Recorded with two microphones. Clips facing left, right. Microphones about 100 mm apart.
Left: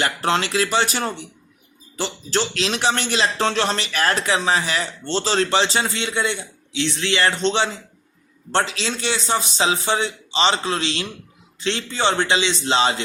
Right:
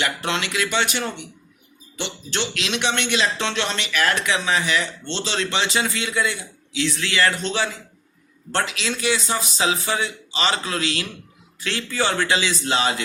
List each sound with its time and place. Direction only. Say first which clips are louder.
0.0 s speech: left 4 dB; 35° left (ahead or behind)